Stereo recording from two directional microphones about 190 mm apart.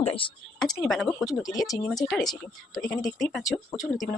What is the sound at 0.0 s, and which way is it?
Speech, 30° left (ahead or behind).